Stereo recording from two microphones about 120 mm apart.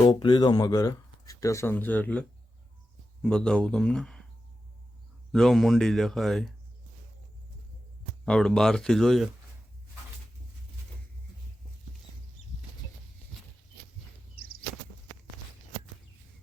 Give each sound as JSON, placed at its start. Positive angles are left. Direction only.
{"t": 0.0, "sound": "speech", "side_deg": 35}
{"t": 3.2, "sound": "speech", "side_deg": 5}
{"t": 5.3, "sound": "speech", "side_deg": 0}
{"t": 8.2, "sound": "speech", "side_deg": 5}